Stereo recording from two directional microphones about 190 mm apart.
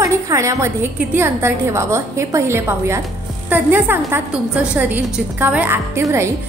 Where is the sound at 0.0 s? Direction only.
15° right (ahead or behind).